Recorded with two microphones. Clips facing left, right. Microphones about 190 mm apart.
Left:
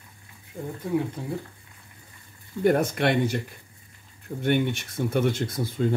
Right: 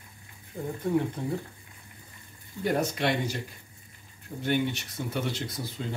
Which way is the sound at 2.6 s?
55° left (ahead or behind).